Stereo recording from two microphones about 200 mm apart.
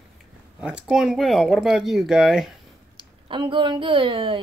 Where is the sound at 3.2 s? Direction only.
25° right (ahead or behind).